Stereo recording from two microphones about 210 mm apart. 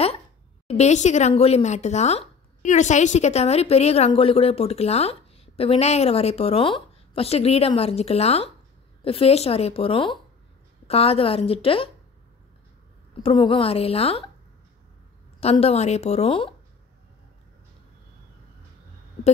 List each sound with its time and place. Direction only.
0.7 s speech: 30° left (ahead or behind)
13.2 s speech: 25° left (ahead or behind)
15.4 s speech: 30° left (ahead or behind)